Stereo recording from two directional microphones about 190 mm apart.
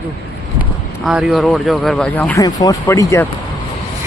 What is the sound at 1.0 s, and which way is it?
Speech, centre (ahead or behind).